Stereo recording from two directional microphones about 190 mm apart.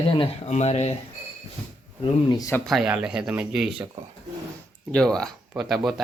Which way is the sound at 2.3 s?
15° left (ahead or behind).